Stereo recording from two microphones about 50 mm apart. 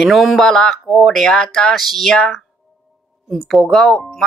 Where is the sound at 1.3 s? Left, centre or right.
Centre.